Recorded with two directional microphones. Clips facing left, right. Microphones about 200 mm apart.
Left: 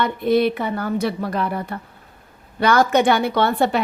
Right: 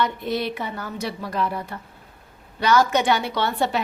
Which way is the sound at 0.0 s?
55° left (ahead or behind).